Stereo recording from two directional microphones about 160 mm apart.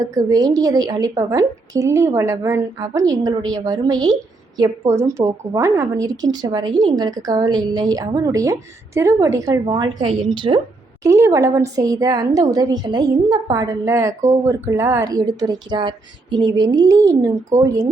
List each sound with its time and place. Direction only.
0.0 s a woman's voice: 20° right (ahead or behind)
11.0 s a woman's voice: 20° right (ahead or behind)